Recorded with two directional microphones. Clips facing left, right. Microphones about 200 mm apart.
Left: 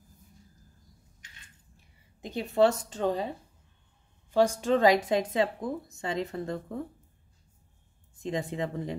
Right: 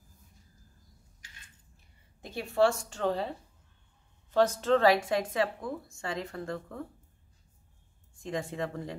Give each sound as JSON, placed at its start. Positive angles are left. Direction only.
{"t": 2.2, "sound": "a woman's voice", "side_deg": 20}
{"t": 8.2, "sound": "a woman's voice", "side_deg": 20}